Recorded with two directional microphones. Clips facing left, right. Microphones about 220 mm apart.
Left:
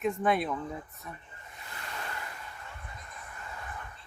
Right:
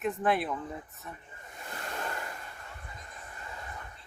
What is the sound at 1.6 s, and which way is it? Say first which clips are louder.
Waves: right 4 dB; 45° right (ahead or behind).